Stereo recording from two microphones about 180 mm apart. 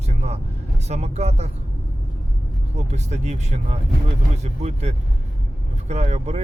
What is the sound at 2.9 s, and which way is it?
Speech, 40° right (ahead or behind).